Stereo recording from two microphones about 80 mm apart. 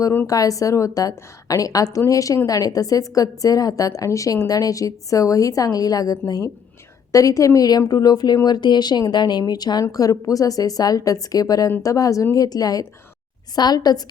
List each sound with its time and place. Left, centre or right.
0.3 s a woman's voice: left